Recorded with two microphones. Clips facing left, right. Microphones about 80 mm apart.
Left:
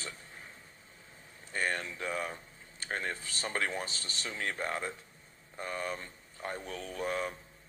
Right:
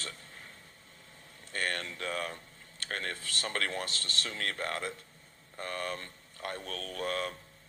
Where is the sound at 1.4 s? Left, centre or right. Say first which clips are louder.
Left 1 dB; centre.